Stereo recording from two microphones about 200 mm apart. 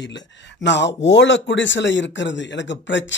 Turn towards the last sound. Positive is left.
turn(degrees=65)  # may be behind; listen again after turning